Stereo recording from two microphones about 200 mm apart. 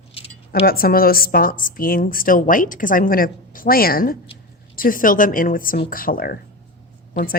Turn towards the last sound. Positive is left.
turn(degrees=45)  # may be behind; listen again after turning